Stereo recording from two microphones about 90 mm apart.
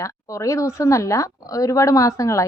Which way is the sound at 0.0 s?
35° left (ahead or behind).